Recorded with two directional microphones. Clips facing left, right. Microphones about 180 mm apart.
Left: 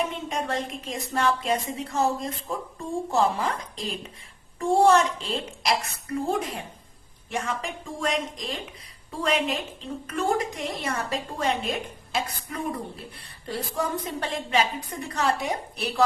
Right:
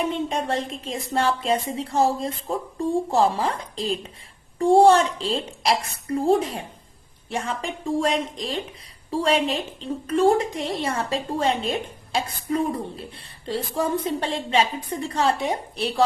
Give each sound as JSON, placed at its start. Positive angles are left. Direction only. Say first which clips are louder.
{"t": 0.0, "sound": "a woman's voice", "louder": "right 4 dB", "side_deg": -30}